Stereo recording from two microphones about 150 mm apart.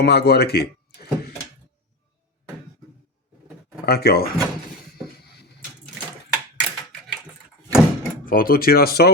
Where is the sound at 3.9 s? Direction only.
90° left.